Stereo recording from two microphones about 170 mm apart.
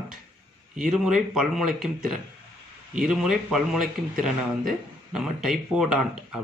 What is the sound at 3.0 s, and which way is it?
Speech, centre (ahead or behind).